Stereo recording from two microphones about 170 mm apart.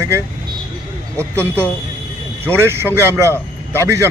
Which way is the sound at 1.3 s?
15° right (ahead or behind).